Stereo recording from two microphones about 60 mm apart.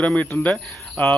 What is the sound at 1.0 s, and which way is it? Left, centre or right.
Speech, left.